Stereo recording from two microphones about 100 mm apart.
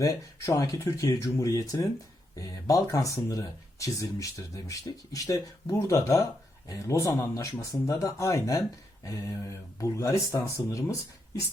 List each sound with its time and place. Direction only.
0.0 s speech: 35° left (ahead or behind)